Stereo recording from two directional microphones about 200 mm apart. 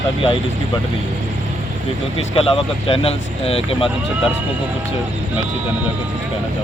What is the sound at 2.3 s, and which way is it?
Speech, 30° left (ahead or behind).